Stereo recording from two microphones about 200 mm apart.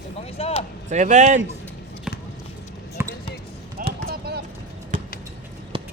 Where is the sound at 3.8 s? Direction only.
45° right (ahead or behind).